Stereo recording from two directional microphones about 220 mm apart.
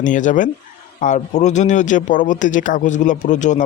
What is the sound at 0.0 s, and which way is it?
A man's voice, 35° left (ahead or behind).